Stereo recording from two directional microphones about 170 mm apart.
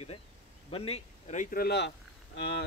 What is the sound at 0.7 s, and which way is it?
Speech, 35° left (ahead or behind).